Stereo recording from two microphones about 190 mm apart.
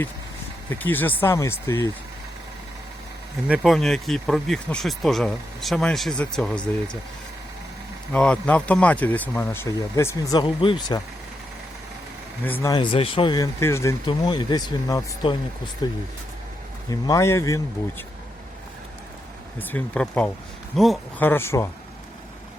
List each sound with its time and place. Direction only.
0.7 s speech: 10° left (ahead or behind)
3.4 s speech: 5° right (ahead or behind)
8.1 s speech: 5° left (ahead or behind); by 11.0 s 20° left (ahead or behind)
12.6 s speech: 25° left (ahead or behind)
19.5 s speech: 10° left (ahead or behind)
21.2 s speech: 10° left (ahead or behind)